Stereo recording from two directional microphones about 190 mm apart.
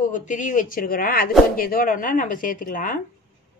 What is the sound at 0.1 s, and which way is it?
Speech, 40° left (ahead or behind).